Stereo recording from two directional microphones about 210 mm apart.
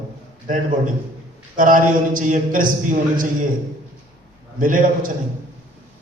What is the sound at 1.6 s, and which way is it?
A man's voice, 40° right (ahead or behind).